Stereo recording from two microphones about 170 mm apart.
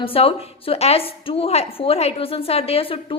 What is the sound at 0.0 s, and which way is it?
A woman's voice, 35° left (ahead or behind).